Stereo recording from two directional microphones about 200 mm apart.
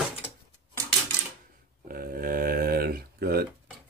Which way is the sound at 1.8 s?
45° right (ahead or behind).